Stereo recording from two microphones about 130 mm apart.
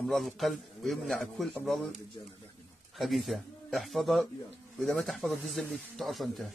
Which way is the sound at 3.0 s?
Centre (ahead or behind).